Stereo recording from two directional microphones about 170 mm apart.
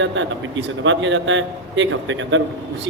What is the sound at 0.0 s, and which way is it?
A man's voice, 90° right.